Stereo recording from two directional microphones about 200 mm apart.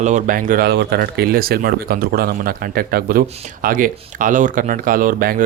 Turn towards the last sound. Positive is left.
turn(degrees=-45)  # may be behind; listen again after turning